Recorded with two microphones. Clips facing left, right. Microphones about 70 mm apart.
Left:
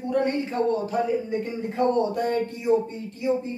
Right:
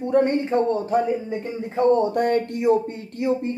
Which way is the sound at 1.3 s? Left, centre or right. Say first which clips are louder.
Even; right.